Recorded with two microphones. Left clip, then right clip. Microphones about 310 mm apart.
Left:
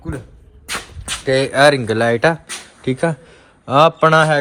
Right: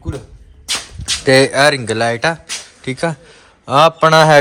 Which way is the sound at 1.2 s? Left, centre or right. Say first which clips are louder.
Right 6 dB; right.